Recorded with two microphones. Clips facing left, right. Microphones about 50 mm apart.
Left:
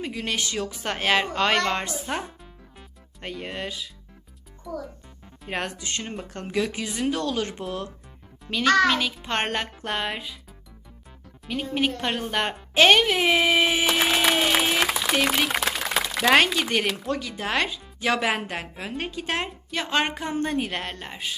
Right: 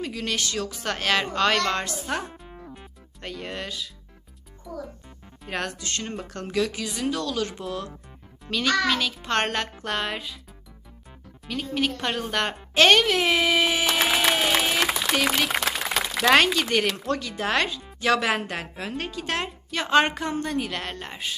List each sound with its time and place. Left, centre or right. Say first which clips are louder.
0.0 s a child's voice: even; centre
4.7 s a woman's voice: left 2 dB; centre
5.5 s speech: even; centre
8.9 s a child's voice: even; centre
11.4 s a child's voice: left 1 dB; centre
11.9 s speech: even; centre
19.7 s a woman's voice: right 4 dB; centre
20.4 s speech: left 2 dB; left
21.0 s a woman's voice: even; centre